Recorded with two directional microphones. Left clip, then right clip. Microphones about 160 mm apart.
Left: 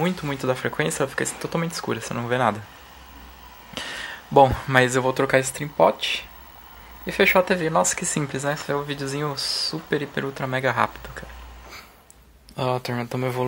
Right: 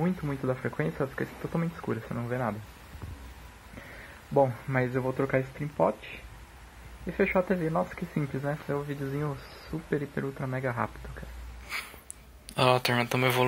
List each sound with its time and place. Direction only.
0.0 s speech: 35° left (ahead or behind)
2.1 s speech: 50° left (ahead or behind)
4.3 s speech: 70° left (ahead or behind); by 5.2 s 50° left (ahead or behind)
5.2 s speech: 35° left (ahead or behind)
7.1 s speech: 35° left (ahead or behind)
12.5 s speech: 20° left (ahead or behind)